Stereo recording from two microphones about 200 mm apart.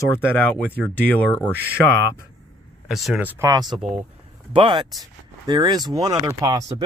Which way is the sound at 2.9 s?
Centre (ahead or behind).